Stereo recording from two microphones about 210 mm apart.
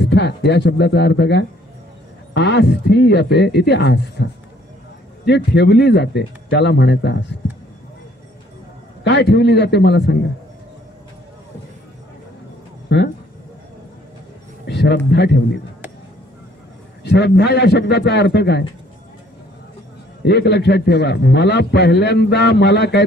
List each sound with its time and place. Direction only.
0.0 s a man's voice: 55° left (ahead or behind)
9.0 s a man's voice: 55° left (ahead or behind)
12.9 s speech: 55° left (ahead or behind)
14.7 s a sound: 55° left (ahead or behind)
15.0 s a man's voice: 55° left (ahead or behind)
17.0 s a man's voice: 55° left (ahead or behind)
20.2 s a man's voice: 55° left (ahead or behind)